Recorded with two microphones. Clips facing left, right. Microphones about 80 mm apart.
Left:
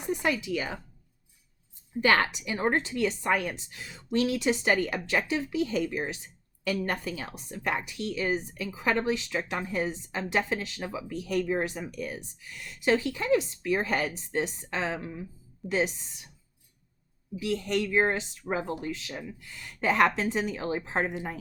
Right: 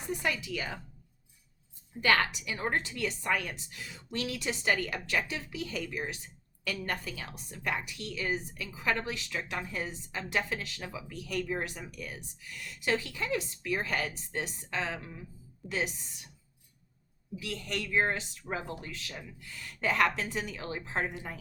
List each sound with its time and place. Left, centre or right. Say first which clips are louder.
0.2 s a woman's voice: left 5 dB; left
2.0 s a woman's voice: left 3 dB; left
17.4 s a woman's voice: left 9 dB; left